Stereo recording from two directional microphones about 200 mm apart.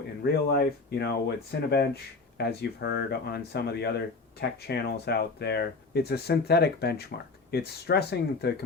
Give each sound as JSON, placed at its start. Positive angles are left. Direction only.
{"t": 0.4, "sound": "speech", "side_deg": 55}